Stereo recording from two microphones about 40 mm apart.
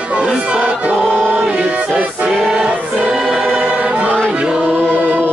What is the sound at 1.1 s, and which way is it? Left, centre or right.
Music, right.